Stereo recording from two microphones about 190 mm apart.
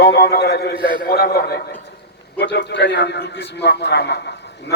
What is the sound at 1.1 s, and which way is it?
Speech, 55° left (ahead or behind).